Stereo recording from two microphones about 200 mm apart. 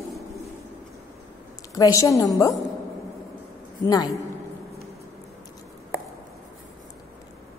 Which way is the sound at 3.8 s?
20° left (ahead or behind).